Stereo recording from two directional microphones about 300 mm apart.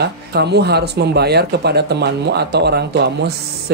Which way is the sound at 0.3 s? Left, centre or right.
Right.